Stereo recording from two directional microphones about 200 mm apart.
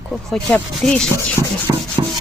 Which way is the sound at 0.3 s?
5° left (ahead or behind).